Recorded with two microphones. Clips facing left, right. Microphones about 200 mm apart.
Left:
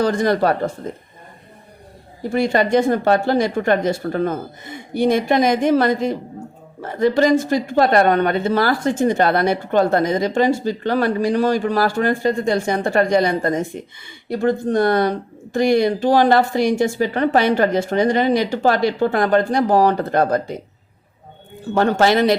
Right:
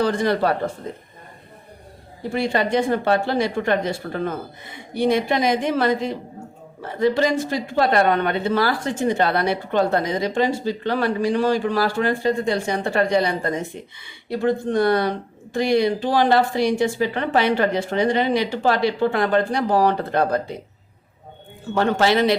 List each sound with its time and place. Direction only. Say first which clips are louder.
0.0 s speech: left 3 dB; 45° left (ahead or behind)
2.3 s speech: left 4 dB; 45° left (ahead or behind)
21.8 s speech: left 3 dB; 45° left (ahead or behind)